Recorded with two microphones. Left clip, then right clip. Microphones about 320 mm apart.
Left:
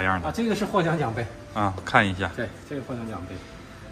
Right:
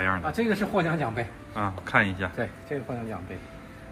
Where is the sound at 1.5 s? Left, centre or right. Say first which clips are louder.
Left 3 dB; centre.